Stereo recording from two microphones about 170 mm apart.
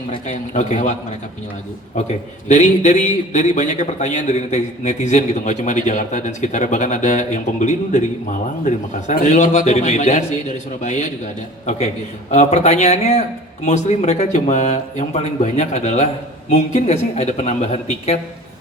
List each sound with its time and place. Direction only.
0.1 s a man's voice: 40° left (ahead or behind)
2.5 s a man's voice: 45° left (ahead or behind)
12.3 s speech: 40° left (ahead or behind)